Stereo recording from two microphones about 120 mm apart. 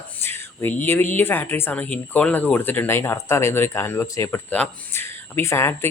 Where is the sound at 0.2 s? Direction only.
20° left (ahead or behind).